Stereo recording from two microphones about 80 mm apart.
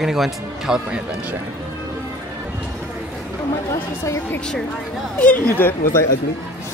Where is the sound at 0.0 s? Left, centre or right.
Centre.